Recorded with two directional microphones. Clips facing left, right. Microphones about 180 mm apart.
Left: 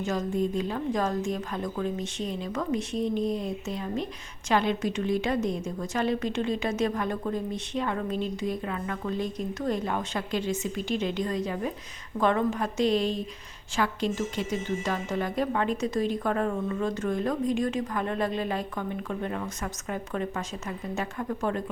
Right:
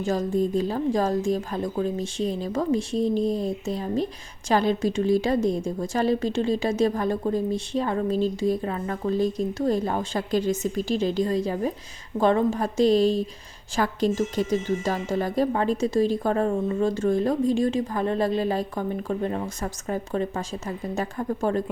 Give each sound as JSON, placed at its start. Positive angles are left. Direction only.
{"t": 0.0, "sound": "a woman's voice", "side_deg": -35}